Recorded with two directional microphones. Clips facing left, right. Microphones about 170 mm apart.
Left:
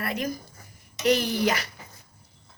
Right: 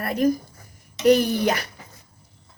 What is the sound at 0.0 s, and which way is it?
Speech, 50° right (ahead or behind).